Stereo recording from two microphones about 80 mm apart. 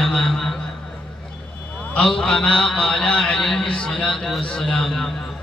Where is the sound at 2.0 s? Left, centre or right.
Centre.